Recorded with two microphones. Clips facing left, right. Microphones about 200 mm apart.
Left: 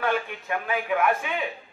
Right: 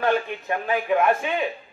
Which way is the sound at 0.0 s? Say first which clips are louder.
Right 4 dB; 30° right (ahead or behind).